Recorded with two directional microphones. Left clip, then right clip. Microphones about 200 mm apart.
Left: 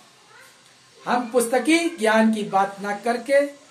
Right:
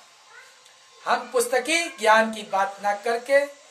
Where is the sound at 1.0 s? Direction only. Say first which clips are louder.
Left 2 dB; 15° right (ahead or behind).